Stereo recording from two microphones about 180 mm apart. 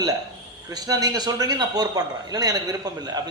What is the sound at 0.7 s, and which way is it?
A man's voice, 20° right (ahead or behind).